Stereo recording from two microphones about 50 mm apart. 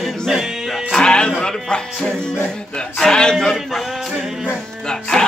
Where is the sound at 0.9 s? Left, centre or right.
Centre.